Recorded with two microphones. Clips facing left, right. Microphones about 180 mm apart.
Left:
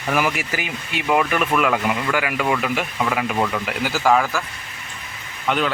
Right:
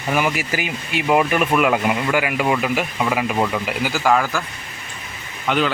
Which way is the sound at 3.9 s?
Centre (ahead or behind).